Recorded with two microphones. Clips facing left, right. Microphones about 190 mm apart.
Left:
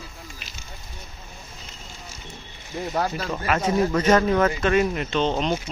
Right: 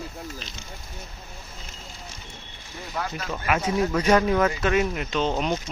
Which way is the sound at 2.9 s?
40° left (ahead or behind).